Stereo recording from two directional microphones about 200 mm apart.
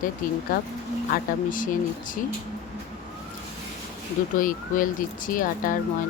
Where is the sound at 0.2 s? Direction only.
45° left (ahead or behind).